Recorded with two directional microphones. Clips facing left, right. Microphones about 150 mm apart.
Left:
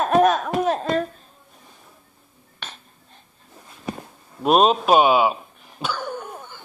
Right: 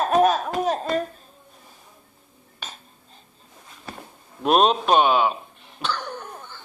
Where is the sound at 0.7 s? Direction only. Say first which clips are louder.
Left 2 dB; centre (ahead or behind).